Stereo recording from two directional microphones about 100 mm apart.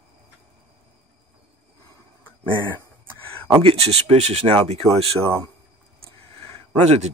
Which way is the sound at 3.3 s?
80° right.